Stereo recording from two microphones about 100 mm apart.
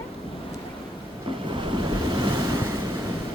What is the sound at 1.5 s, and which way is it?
Waves, 55° right (ahead or behind).